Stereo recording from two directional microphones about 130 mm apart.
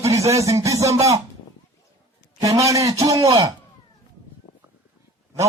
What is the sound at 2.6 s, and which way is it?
Speech, 25° right (ahead or behind).